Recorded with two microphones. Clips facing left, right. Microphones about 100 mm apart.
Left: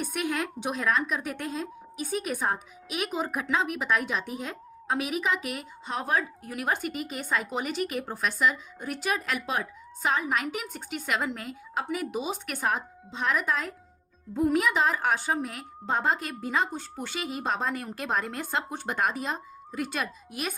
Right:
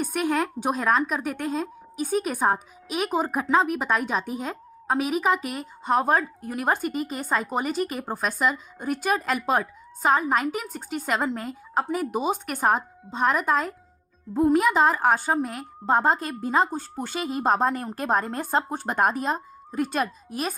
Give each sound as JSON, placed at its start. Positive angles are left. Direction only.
{"t": 0.0, "sound": "a woman's voice", "side_deg": -45}